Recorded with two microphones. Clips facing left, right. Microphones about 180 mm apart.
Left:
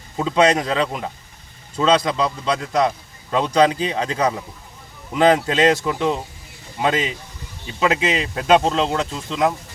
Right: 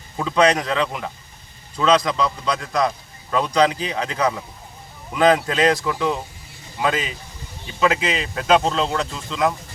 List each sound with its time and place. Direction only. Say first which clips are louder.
0.2 s a man's voice: left 1 dB; 25° left (ahead or behind)